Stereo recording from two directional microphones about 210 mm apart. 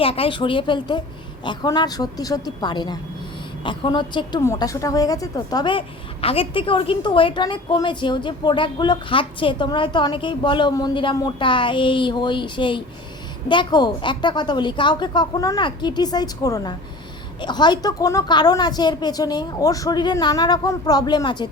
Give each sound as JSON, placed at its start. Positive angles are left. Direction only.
{"t": 0.0, "sound": "a woman's voice", "side_deg": 25}